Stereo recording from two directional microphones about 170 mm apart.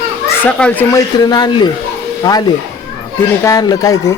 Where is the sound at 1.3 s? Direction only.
25° left (ahead or behind).